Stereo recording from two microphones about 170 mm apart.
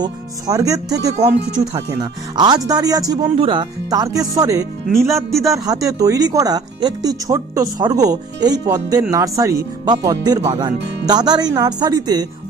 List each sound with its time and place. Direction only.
0.0 s speech: 20° right (ahead or behind)
5.1 s a man's voice: centre (ahead or behind)
5.5 s speech: 20° right (ahead or behind)